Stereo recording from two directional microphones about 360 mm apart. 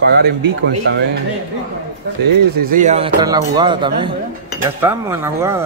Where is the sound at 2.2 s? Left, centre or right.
Right.